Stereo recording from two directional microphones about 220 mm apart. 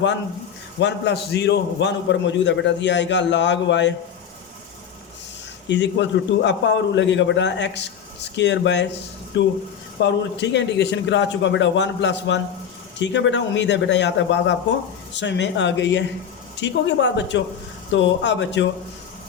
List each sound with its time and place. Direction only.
0.8 s a man's voice: 50° left (ahead or behind)
5.6 s a man's voice: 55° left (ahead or behind)
10.0 s a man's voice: 55° left (ahead or behind)